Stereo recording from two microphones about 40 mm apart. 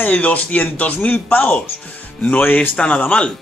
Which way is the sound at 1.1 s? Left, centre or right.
Left.